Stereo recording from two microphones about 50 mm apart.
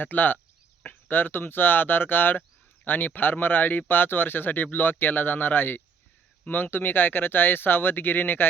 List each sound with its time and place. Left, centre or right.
0.0 s speech: left